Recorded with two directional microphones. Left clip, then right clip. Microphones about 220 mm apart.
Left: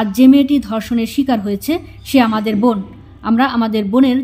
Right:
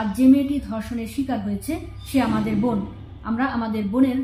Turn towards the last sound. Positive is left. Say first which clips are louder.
# left 8 dB
turn(degrees=45)  # may be behind; listen again after turning